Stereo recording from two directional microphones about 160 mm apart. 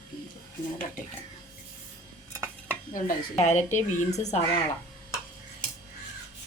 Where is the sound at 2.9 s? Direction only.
50° left (ahead or behind).